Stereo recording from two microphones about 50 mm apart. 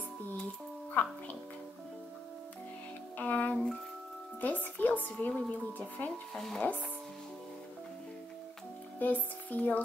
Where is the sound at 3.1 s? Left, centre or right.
Left.